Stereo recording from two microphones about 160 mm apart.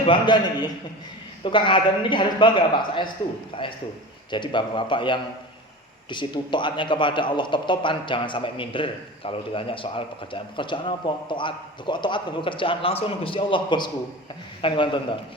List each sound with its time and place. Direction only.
1.5 s a man's voice: 30° left (ahead or behind)